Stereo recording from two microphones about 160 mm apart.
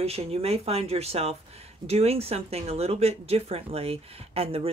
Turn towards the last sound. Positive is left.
turn(degrees=-35)  # may be behind; listen again after turning